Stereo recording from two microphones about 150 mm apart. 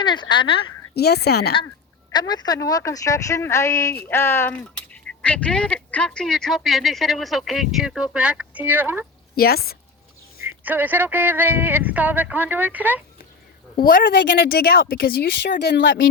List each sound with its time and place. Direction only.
0.0 s speech: 30° left (ahead or behind)
0.9 s a woman's voice: 90° left
2.1 s speech: 30° left (ahead or behind); by 9.0 s 15° right (ahead or behind)
9.3 s a woman's voice: 90° left
10.4 s speech: 15° right (ahead or behind)
13.7 s a woman's voice: 70° left (ahead or behind)